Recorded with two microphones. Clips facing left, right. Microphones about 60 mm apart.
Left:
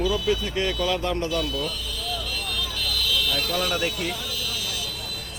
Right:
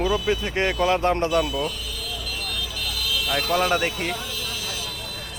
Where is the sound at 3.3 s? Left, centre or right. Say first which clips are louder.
Right 4 dB; right.